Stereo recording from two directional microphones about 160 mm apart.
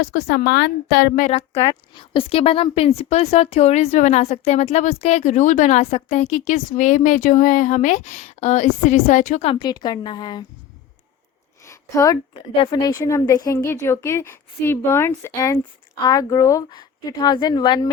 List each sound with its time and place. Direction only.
0.0 s a woman's voice: 75° left (ahead or behind)
2.0 s a woman's voice: 35° left (ahead or behind); by 9.4 s 50° left (ahead or behind)
9.4 s a woman's voice: 35° left (ahead or behind)
11.6 s a woman's voice: 20° left (ahead or behind)